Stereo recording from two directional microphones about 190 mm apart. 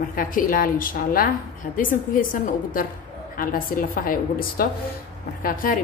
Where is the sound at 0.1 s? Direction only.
45° left (ahead or behind).